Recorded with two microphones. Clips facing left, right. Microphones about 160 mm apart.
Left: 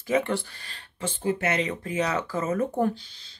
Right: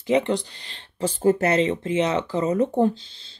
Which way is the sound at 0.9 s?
35° right (ahead or behind).